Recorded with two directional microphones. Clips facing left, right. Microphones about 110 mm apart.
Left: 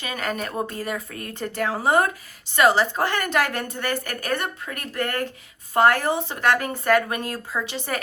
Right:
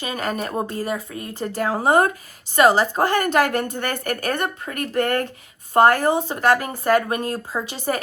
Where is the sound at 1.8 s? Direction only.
45° right (ahead or behind).